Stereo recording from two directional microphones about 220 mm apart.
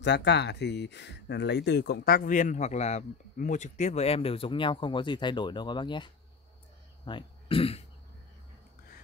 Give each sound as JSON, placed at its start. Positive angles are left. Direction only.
{"t": 0.0, "sound": "speech", "side_deg": 50}